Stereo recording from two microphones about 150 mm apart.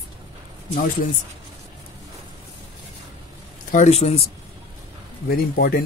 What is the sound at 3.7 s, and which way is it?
Speech, 50° left (ahead or behind).